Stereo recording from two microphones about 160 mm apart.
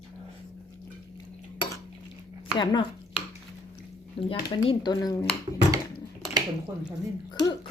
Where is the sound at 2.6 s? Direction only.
30° left (ahead or behind).